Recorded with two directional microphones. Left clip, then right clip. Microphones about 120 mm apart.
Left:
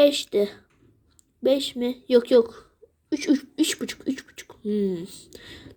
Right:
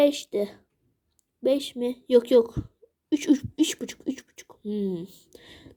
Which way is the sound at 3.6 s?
25° right (ahead or behind).